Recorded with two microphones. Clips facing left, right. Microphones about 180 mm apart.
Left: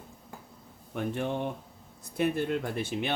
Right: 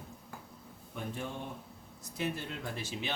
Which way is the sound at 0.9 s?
70° left (ahead or behind).